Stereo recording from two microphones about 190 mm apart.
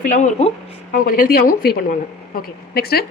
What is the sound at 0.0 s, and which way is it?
A woman's voice, 40° left (ahead or behind).